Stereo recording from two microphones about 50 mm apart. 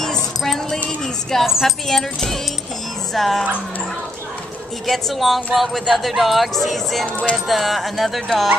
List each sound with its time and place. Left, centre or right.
0.0 s a sound: centre
0.8 s music: centre
1.4 s speech: centre
1.9 s speech: centre
4.8 s speech: centre